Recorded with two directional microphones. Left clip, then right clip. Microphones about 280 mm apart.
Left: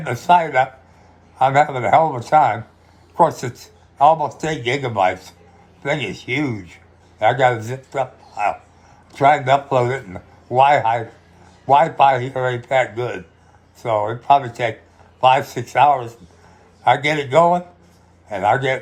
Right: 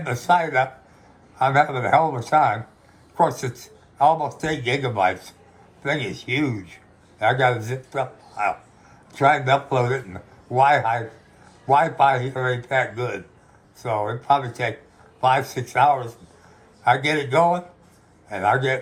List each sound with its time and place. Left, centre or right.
0.0 s speech: centre